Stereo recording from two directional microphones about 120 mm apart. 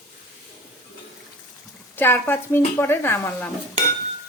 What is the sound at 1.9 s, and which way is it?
Speech, 20° left (ahead or behind).